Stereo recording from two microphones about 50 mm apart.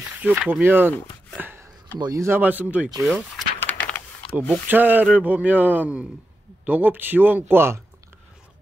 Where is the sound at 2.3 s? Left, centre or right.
Right.